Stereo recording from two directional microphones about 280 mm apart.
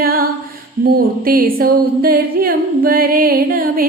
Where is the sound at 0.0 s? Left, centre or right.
Right.